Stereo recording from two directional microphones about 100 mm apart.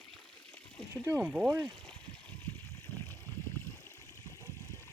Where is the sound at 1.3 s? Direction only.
Centre (ahead or behind).